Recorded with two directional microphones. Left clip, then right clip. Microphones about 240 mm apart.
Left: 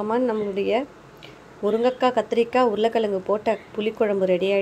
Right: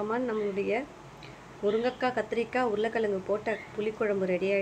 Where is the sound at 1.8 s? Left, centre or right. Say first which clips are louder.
Left 9 dB; left.